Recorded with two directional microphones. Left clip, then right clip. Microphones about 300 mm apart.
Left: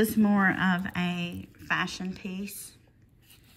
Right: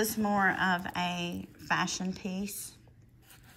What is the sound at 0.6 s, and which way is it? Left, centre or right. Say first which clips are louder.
Speech: even; centre.